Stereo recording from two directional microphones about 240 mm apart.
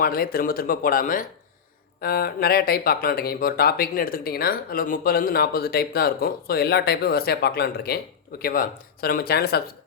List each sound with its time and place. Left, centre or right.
0.0 s speech: left